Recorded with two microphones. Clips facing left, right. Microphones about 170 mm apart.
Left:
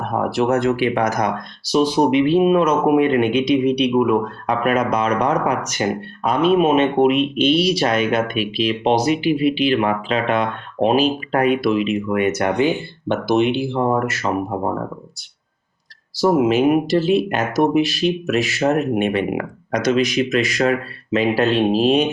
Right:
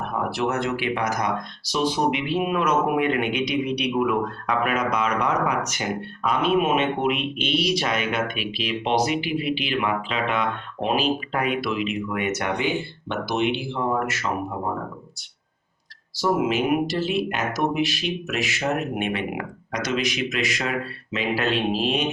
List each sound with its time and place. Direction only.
0.1 s speech: 40° left (ahead or behind)
16.2 s speech: 35° left (ahead or behind)